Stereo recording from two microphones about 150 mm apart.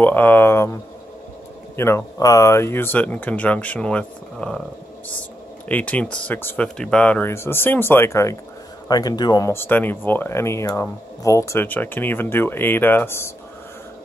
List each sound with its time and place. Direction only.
0.0 s speech: 10° left (ahead or behind)
1.8 s speech: 15° left (ahead or behind)
5.7 s a man's voice: 10° left (ahead or behind); by 9.5 s 25° left (ahead or behind)
9.5 s speech: 15° left (ahead or behind)